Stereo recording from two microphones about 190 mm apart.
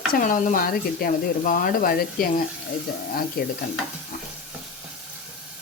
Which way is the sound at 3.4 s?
55° left (ahead or behind).